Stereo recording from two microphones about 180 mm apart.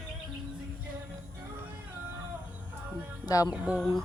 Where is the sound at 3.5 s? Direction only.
5° right (ahead or behind).